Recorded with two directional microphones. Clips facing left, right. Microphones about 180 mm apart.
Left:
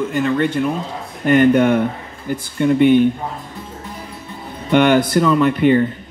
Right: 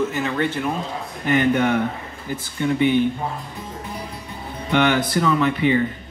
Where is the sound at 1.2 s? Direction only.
50° left (ahead or behind).